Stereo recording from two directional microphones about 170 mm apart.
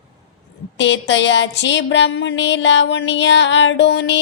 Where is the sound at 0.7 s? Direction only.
90° left.